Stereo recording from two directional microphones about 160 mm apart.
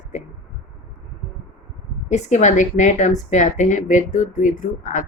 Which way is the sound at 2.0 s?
45° left (ahead or behind).